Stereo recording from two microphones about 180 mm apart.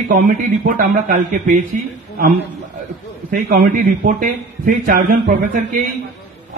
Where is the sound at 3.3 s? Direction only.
60° right (ahead or behind).